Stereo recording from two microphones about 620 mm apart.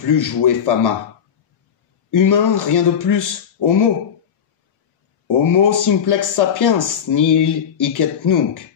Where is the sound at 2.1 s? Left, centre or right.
Left.